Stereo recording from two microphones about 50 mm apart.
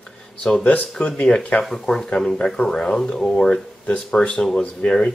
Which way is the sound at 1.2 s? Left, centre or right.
Left.